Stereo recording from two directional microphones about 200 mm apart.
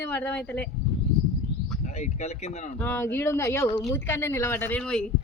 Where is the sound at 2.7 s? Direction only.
10° left (ahead or behind).